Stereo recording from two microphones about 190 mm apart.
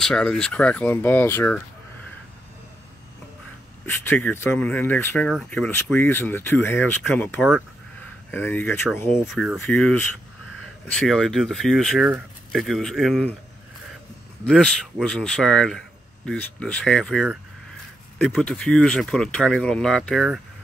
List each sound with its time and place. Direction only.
0.0 s speech: centre (ahead or behind)
3.8 s speech: 10° left (ahead or behind)
9.3 s speech: centre (ahead or behind)
14.5 s speech: centre (ahead or behind)